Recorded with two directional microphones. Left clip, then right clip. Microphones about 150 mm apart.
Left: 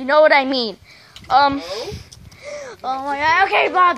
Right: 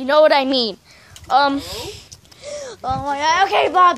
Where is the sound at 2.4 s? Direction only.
10° right (ahead or behind).